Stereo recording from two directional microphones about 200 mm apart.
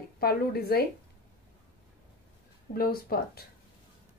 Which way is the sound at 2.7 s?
50° left (ahead or behind).